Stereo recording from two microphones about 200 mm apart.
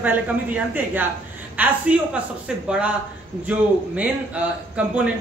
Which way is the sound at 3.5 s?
5° right (ahead or behind).